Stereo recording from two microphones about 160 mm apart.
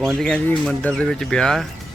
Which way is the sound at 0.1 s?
5° left (ahead or behind).